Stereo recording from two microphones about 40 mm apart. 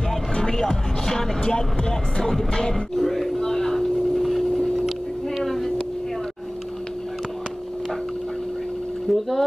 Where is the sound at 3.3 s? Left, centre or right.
Centre.